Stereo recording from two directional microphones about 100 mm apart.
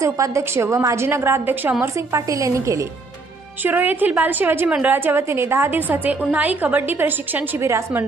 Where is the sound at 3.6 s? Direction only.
20° right (ahead or behind).